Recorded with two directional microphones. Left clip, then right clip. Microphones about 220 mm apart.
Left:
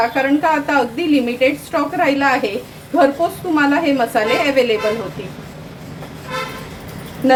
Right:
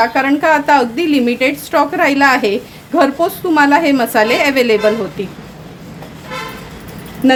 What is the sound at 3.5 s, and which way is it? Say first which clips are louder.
A woman's voice: right 6 dB; 50° right (ahead or behind).